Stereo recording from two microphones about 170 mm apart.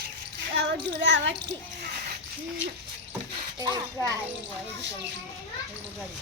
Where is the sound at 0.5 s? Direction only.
90° right.